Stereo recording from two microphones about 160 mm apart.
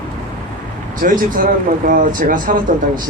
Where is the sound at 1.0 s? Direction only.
60° right (ahead or behind).